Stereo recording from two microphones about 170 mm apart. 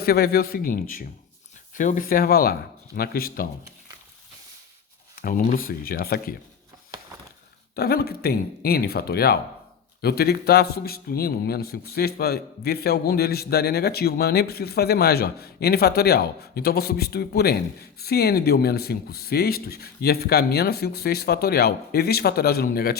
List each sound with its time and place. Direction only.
0.0 s speech: 65° left (ahead or behind)
5.1 s speech: 55° left (ahead or behind)
7.8 s a man's voice: 65° left (ahead or behind)